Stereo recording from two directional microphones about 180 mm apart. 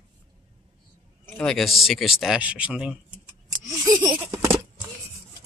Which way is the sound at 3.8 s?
25° right (ahead or behind).